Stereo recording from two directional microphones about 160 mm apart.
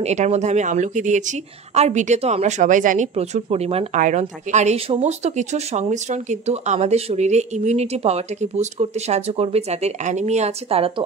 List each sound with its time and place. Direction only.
0.0 s a woman's voice: 45° right (ahead or behind)